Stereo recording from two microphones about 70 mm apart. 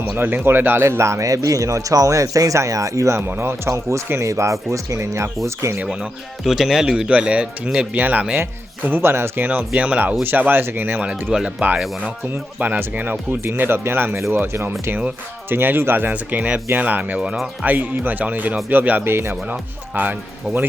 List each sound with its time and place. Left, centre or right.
0.2 s speech: right
3.2 s speech: right
3.7 s speech: right
5.8 s speech: centre; by 11.0 s right
11.0 s speech: centre
17.3 s speech: centre
17.7 s speech: right
19.5 s speech: right